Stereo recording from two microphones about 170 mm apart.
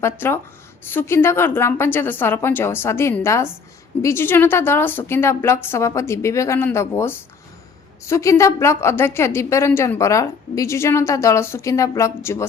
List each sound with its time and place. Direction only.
0.0 s a woman's voice: 15° left (ahead or behind)